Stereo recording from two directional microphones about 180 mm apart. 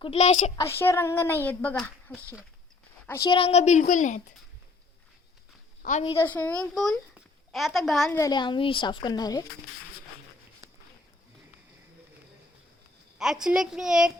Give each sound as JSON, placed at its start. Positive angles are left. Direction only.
{"t": 0.0, "sound": "speech", "side_deg": 35}
{"t": 0.5, "sound": "speech", "side_deg": 15}
{"t": 3.1, "sound": "a woman's voice", "side_deg": 20}
{"t": 3.3, "sound": "a woman's voice", "side_deg": 35}
{"t": 5.8, "sound": "a woman's voice", "side_deg": 40}
{"t": 6.1, "sound": "speech", "side_deg": 10}
{"t": 8.1, "sound": "a woman's voice", "side_deg": 20}
{"t": 13.1, "sound": "a woman's voice", "side_deg": -5}